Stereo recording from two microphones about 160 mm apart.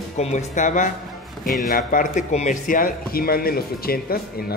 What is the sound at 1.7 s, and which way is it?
Speech, 60° left (ahead or behind).